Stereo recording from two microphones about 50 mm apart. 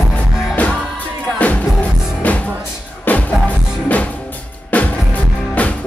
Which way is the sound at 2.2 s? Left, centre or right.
Left.